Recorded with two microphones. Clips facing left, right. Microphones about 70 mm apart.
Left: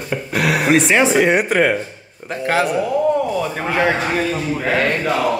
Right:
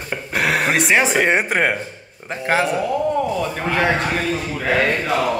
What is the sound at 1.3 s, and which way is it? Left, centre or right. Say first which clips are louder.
Speech: left 3 dB; right.